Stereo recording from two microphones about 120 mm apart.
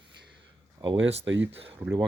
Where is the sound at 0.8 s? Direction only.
50° right (ahead or behind).